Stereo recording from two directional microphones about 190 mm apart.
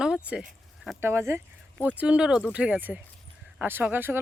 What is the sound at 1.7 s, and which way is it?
Speech, 10° left (ahead or behind).